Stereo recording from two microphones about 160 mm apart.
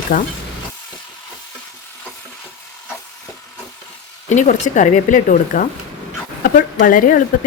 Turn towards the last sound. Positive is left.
turn(degrees=60)  # may be behind; listen again after turning